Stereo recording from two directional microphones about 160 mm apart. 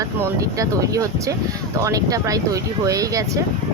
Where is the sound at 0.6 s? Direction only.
20° right (ahead or behind).